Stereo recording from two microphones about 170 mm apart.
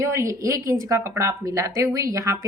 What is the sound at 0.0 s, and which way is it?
A woman's voice, 15° right (ahead or behind).